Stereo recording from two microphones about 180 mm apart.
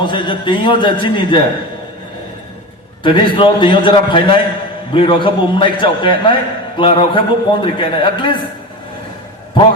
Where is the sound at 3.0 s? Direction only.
25° left (ahead or behind).